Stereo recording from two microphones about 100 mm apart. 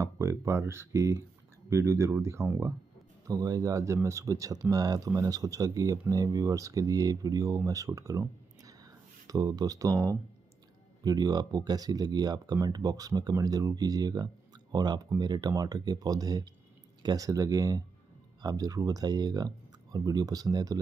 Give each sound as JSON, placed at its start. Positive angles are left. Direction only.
{"t": 0.0, "sound": "speech", "side_deg": -30}
{"t": 3.3, "sound": "speech", "side_deg": -35}
{"t": 11.1, "sound": "speech", "side_deg": -40}